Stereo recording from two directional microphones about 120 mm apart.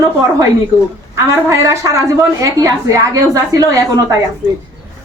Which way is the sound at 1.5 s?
25° right (ahead or behind).